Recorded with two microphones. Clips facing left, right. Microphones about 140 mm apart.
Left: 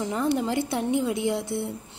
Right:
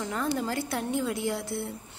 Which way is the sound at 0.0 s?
20° left (ahead or behind).